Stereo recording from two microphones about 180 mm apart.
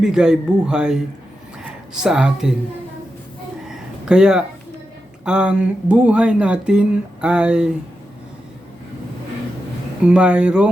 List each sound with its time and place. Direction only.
0.0 s speech: 5° right (ahead or behind)
3.7 s a sound: 5° right (ahead or behind)
5.2 s speech: 5° right (ahead or behind)
10.0 s speech: 5° right (ahead or behind)